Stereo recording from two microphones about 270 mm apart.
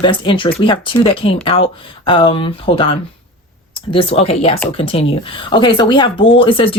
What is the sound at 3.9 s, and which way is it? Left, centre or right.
Speech, left.